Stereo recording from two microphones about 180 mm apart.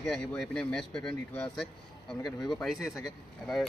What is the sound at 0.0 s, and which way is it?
Speech, 5° left (ahead or behind).